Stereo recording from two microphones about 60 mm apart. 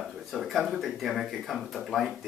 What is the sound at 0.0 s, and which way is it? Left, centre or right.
Speech, centre.